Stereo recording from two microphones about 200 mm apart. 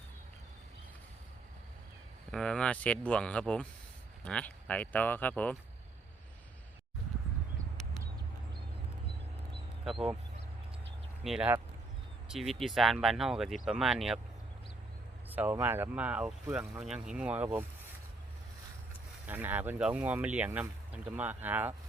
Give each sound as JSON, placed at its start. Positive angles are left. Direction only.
{"t": 2.3, "sound": "speech", "side_deg": 5}
{"t": 9.8, "sound": "speech", "side_deg": 0}
{"t": 11.2, "sound": "speech", "side_deg": -5}
{"t": 15.3, "sound": "speech", "side_deg": -10}
{"t": 19.2, "sound": "speech", "side_deg": -10}